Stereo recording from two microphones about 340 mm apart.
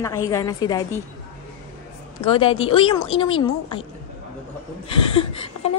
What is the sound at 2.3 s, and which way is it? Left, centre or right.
A woman's voice, centre.